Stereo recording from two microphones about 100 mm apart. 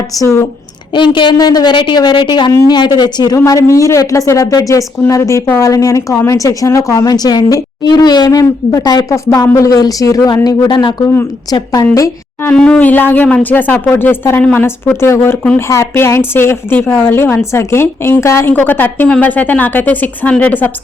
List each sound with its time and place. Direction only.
0.2 s a woman's voice: 30° left (ahead or behind)
0.9 s a woman's voice: 55° left (ahead or behind)
3.3 s a woman's voice: 35° left (ahead or behind)
10.7 s a woman's voice: 50° left (ahead or behind)
12.5 s a woman's voice: 10° left (ahead or behind)